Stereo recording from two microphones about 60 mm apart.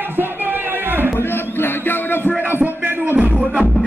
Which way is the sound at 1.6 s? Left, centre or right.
Left.